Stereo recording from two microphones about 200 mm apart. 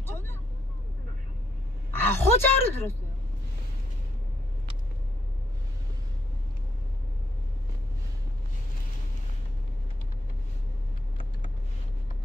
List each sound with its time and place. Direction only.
0.0 s vehicle: 10° left (ahead or behind)
1.9 s speech: 10° left (ahead or behind)